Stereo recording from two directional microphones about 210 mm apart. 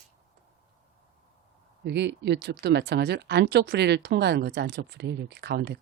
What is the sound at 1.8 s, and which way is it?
Speech, 55° right (ahead or behind).